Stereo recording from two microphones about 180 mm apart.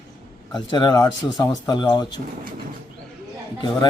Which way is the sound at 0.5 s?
25° left (ahead or behind).